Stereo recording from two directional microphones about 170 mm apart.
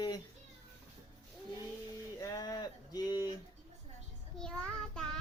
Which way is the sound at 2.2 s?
20° left (ahead or behind).